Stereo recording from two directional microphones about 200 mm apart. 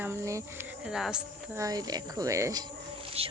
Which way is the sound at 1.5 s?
15° right (ahead or behind).